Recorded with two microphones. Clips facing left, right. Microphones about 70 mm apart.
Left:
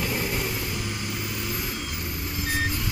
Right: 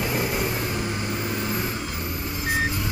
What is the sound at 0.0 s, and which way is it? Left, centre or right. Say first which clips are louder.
Vehicle: right 3 dB; right.